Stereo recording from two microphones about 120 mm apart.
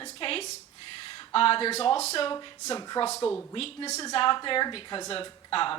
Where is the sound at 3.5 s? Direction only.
45° left (ahead or behind).